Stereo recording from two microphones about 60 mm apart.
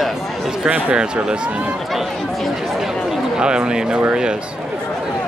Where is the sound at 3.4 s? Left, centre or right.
Centre.